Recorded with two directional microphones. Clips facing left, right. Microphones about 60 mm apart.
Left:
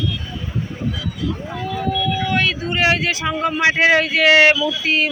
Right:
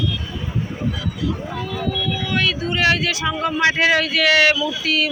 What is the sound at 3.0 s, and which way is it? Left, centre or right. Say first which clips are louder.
Speech: left 1 dB; left.